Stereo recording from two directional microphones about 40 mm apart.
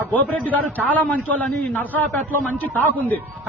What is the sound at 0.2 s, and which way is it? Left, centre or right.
A man's voice, left.